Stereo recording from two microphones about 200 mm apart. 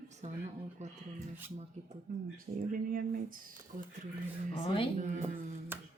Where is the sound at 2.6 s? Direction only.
45° right (ahead or behind).